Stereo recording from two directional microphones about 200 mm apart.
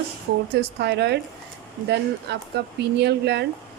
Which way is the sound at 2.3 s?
60° right (ahead or behind).